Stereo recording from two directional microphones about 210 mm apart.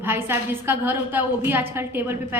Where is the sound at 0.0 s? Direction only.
10° right (ahead or behind).